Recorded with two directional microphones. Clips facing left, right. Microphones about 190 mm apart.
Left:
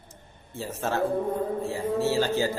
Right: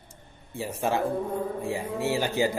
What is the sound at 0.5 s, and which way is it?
A man's voice, 15° right (ahead or behind).